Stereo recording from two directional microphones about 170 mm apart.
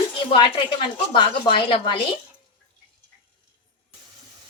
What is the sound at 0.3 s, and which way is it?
Speech, 30° left (ahead or behind).